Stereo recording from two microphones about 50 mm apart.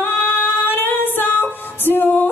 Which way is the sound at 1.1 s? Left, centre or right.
Left.